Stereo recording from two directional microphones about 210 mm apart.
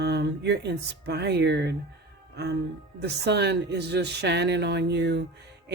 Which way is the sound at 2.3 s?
50° right (ahead or behind).